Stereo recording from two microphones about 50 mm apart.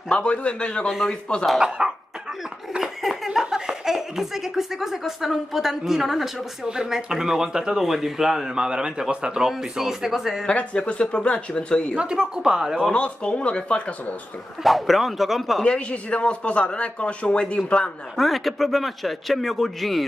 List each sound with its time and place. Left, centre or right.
0.1 s a man's voice: left
0.8 s a man's voice: centre
1.8 s speech: centre
2.8 s laughter: centre
3.3 s speech: centre
10.4 s a man's voice: left
12.0 s speech: centre
12.9 s a man's voice: left
14.6 s a man's voice: centre
15.6 s a man's voice: left
18.1 s a man's voice: centre